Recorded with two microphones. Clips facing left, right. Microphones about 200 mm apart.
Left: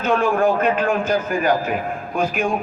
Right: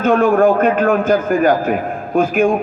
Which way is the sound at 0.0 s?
50° right (ahead or behind).